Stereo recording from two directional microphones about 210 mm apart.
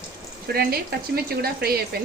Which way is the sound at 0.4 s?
45° right (ahead or behind).